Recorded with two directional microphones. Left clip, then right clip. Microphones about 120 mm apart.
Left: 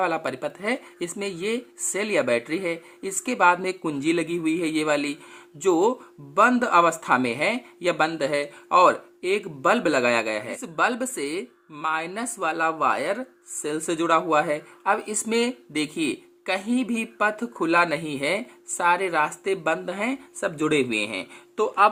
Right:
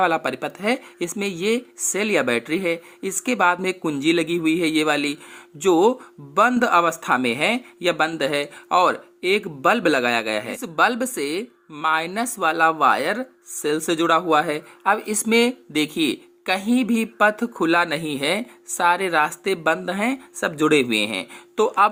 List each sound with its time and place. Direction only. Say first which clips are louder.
0.0 s speech: right 5 dB; 35° right (ahead or behind)